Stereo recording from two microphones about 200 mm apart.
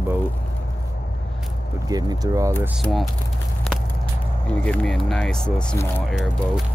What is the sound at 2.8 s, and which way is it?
Speech, centre (ahead or behind).